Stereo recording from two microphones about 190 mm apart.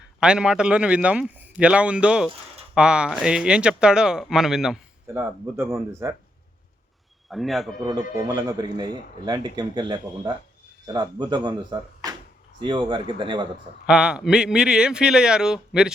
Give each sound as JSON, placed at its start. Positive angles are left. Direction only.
{"t": 0.2, "sound": "a man's voice", "side_deg": -5}
{"t": 7.3, "sound": "a man's voice", "side_deg": 0}
{"t": 8.1, "sound": "speech", "side_deg": -20}
{"t": 13.8, "sound": "a man's voice", "side_deg": -5}